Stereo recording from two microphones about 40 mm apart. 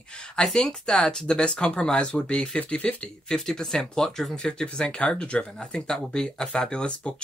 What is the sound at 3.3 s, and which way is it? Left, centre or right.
Speech, centre.